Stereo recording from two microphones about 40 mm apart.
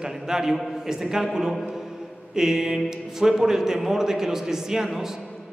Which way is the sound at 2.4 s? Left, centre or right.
Centre.